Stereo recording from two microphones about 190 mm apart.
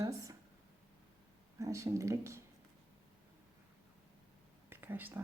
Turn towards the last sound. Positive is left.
turn(degrees=-10)  # may be behind; listen again after turning